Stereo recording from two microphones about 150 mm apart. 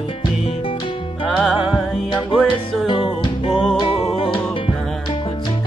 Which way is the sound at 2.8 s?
35° left (ahead or behind).